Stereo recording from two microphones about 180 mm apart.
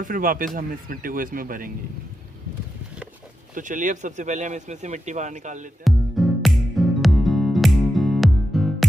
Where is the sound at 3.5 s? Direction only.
45° right (ahead or behind).